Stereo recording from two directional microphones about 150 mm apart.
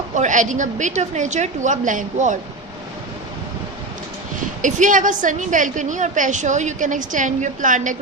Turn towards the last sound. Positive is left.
turn(degrees=-60)  # may be behind; listen again after turning